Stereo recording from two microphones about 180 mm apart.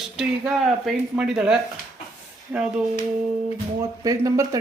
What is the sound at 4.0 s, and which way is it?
Speech, 20° right (ahead or behind).